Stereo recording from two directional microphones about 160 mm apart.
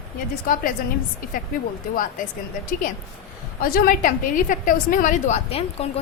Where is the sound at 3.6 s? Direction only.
60° left (ahead or behind).